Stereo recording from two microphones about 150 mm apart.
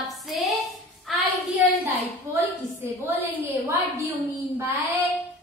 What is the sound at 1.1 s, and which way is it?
Child singing, centre (ahead or behind).